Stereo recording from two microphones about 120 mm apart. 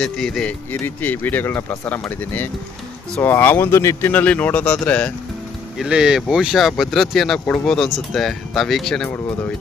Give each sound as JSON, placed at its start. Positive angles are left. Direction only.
{"t": 0.0, "sound": "speech", "side_deg": 5}
{"t": 4.1, "sound": "speech", "side_deg": 10}
{"t": 5.7, "sound": "speech", "side_deg": -5}